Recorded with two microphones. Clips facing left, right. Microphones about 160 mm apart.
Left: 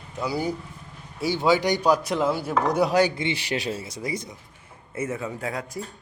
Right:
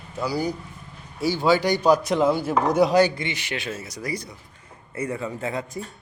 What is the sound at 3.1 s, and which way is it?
Speech, 30° left (ahead or behind).